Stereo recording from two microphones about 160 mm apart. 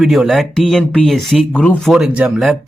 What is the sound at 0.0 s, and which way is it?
Speech, centre (ahead or behind).